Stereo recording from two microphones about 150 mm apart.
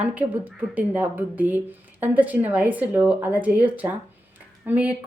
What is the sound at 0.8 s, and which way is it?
A woman's voice, 10° right (ahead or behind).